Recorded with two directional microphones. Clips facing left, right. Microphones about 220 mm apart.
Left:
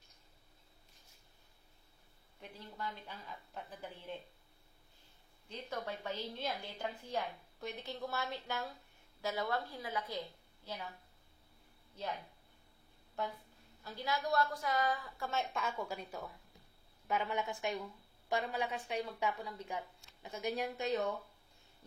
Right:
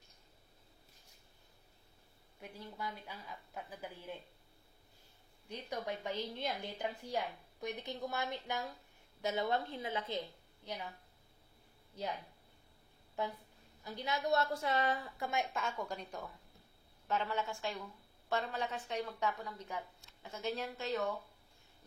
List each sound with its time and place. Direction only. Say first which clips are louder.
2.4 s a woman's voice: right 1 dB; 10° right (ahead or behind)
5.5 s a woman's voice: right 1 dB; 15° right (ahead or behind)
13.8 s a woman's voice: right 1 dB; 20° right (ahead or behind)
15.5 s a woman's voice: even; 5° left (ahead or behind)